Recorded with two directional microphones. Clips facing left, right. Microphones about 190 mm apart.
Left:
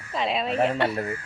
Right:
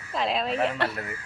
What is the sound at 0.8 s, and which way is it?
Speech, 30° left (ahead or behind).